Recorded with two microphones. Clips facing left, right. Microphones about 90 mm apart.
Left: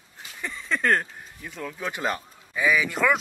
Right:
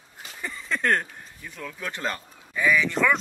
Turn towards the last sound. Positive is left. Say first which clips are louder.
# even
turn(degrees=5)  # may be behind; listen again after turning